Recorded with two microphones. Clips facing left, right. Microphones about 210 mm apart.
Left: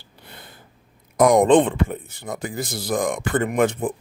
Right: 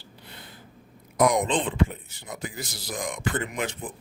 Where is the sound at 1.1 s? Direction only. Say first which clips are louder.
Left 8 dB; 50° left (ahead or behind).